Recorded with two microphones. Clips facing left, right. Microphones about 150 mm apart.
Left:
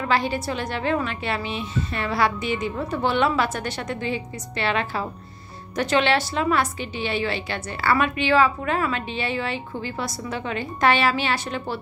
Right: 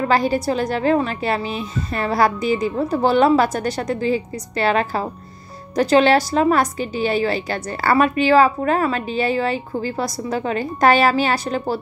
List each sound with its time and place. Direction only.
0.0 s a woman's voice: 40° right (ahead or behind)